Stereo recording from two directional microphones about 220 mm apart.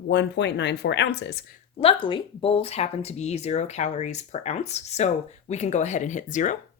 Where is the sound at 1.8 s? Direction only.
25° left (ahead or behind).